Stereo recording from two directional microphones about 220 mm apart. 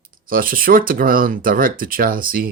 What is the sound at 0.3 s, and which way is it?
Speech, 40° right (ahead or behind).